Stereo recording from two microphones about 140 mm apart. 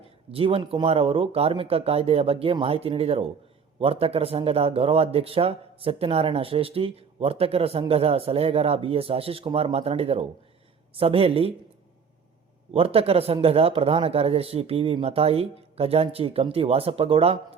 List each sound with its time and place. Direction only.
0.3 s speech: 40° right (ahead or behind)
12.7 s speech: 45° right (ahead or behind)